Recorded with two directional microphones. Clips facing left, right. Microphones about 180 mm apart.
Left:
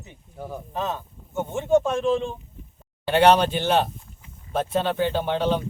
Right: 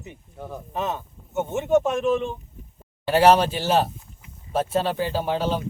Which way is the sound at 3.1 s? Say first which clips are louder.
Right 1 dB; 5° right (ahead or behind).